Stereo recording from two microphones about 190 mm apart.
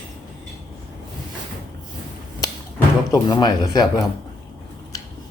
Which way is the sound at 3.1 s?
20° left (ahead or behind).